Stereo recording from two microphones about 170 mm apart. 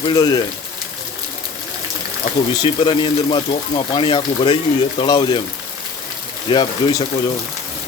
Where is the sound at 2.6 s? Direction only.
30° left (ahead or behind).